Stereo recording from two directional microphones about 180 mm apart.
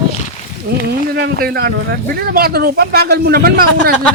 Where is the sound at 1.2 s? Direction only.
55° right (ahead or behind).